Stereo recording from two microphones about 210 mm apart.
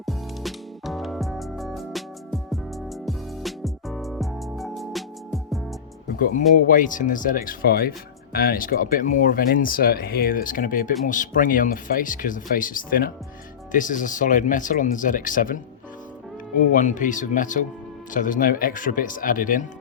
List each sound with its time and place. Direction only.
0.0 s music: centre (ahead or behind)
6.1 s speech: 40° left (ahead or behind)
16.7 s speech: 35° left (ahead or behind)